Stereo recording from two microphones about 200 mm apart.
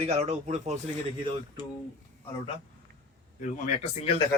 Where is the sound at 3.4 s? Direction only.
35° left (ahead or behind).